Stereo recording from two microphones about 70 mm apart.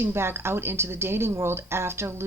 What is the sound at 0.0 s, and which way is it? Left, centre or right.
A woman's voice, right.